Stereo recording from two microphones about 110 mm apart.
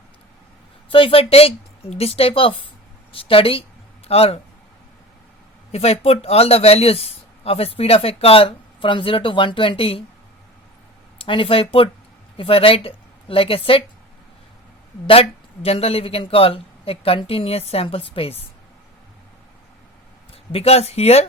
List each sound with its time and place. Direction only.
0.9 s speech: 55° left (ahead or behind)
5.7 s speech: 70° left (ahead or behind)
11.2 s speech: 55° left (ahead or behind)
15.0 s speech: 60° left (ahead or behind)
20.3 s speech: 65° left (ahead or behind)